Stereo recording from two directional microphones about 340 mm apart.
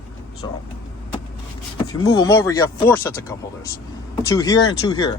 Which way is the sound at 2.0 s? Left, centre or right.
Centre.